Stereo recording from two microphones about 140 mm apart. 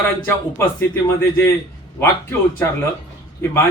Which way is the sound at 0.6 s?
15° left (ahead or behind).